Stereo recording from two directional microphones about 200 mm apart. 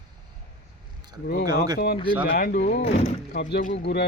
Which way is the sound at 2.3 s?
50° left (ahead or behind).